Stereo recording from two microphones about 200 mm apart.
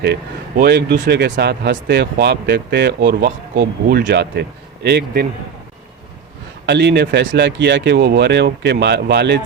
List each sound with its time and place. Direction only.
0.0 s speech: 55° right (ahead or behind)
6.7 s speech: 60° right (ahead or behind)